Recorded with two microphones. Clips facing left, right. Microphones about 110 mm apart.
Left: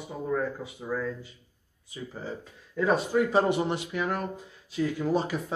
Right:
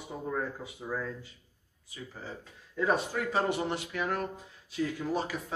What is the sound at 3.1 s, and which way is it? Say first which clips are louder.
Speech: left 7 dB; 20° left (ahead or behind).